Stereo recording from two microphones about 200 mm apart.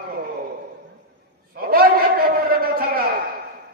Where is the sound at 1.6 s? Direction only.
50° right (ahead or behind).